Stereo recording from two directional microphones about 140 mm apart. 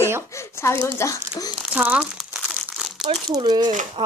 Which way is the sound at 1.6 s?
10° right (ahead or behind).